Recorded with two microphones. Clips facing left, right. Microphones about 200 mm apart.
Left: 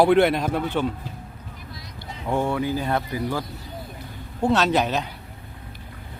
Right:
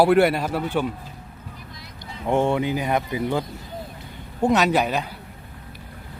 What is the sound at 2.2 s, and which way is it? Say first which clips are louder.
Speech: right 3 dB; 25° right (ahead or behind).